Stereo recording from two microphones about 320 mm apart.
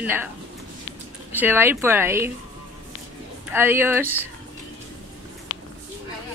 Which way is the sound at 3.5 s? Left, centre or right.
Centre.